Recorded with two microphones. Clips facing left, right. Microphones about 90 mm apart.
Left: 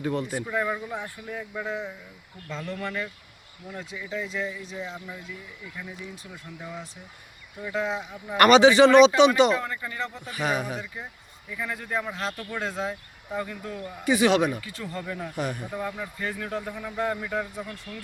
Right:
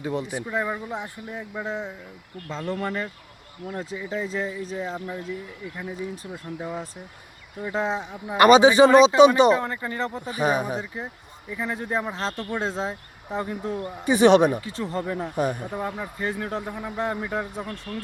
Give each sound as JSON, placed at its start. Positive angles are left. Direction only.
{"t": 0.0, "sound": "speech", "side_deg": -15}
{"t": 6.3, "sound": "speech", "side_deg": -40}
{"t": 8.3, "sound": "speech", "side_deg": -20}
{"t": 8.9, "sound": "speech", "side_deg": -35}
{"t": 9.1, "sound": "speech", "side_deg": -20}
{"t": 14.0, "sound": "speech", "side_deg": -25}
{"t": 15.5, "sound": "speech", "side_deg": -25}
{"t": 17.7, "sound": "speech", "side_deg": -50}